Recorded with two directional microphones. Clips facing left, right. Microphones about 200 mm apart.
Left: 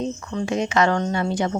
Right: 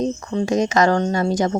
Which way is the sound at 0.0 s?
40° right (ahead or behind).